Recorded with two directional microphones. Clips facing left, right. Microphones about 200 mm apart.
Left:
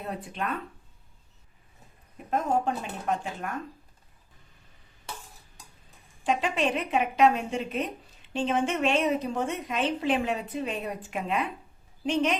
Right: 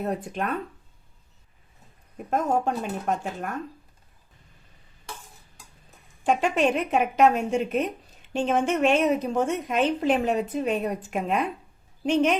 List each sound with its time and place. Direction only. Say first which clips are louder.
0.0 s a woman's voice: right 6 dB; 45° right (ahead or behind)
2.1 s a woman's voice: right 2 dB; 45° right (ahead or behind)
6.2 s a woman's voice: right 4 dB; 50° right (ahead or behind)